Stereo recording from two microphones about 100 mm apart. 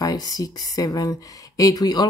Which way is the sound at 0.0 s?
40° left (ahead or behind).